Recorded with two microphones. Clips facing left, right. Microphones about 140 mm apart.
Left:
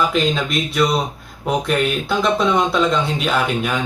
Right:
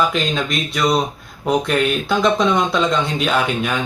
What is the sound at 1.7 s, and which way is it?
Speech, 5° left (ahead or behind).